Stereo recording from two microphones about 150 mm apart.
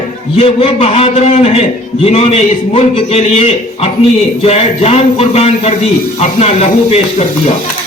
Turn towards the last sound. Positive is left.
turn(degrees=45)  # may be behind; listen again after turning